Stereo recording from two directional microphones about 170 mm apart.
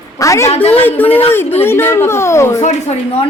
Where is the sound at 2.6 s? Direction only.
40° left (ahead or behind).